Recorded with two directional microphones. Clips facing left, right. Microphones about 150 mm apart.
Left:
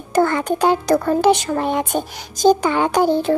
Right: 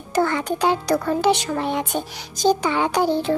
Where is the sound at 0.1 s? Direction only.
50° left (ahead or behind).